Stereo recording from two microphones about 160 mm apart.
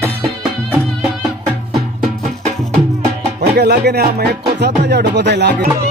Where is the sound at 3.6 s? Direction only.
85° right.